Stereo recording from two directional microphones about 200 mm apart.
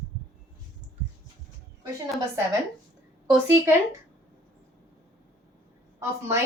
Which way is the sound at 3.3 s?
10° right (ahead or behind).